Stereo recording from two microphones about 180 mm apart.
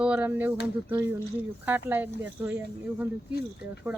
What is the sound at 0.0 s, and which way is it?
Speech, 10° right (ahead or behind).